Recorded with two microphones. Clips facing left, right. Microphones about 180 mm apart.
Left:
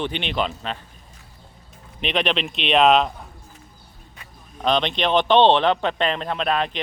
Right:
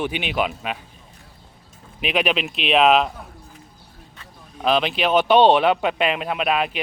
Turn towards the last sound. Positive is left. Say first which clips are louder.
# right 1 dB
turn(degrees=-10)  # may be behind; listen again after turning